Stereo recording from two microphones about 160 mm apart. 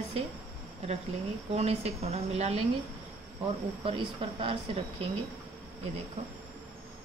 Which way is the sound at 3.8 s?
35° right (ahead or behind).